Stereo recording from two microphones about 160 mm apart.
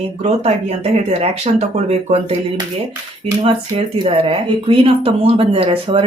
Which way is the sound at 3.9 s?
35° right (ahead or behind).